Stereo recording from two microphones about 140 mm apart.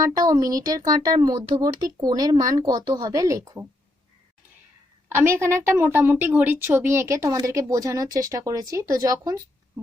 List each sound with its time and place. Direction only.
0.0 s a woman's voice: 25° right (ahead or behind)
5.1 s a woman's voice: 20° right (ahead or behind)